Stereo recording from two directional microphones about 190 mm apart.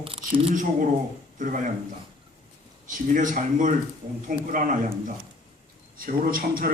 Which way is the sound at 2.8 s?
45° right (ahead or behind).